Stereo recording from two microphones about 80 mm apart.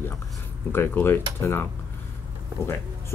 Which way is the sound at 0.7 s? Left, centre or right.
Left.